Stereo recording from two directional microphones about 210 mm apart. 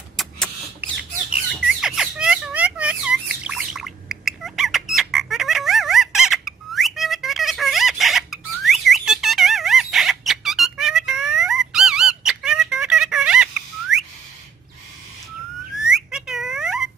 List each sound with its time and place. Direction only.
0.2 s rodents: 5° left (ahead or behind)
1.8 s squawk: 5° right (ahead or behind)
15.9 s a sound: centre (ahead or behind)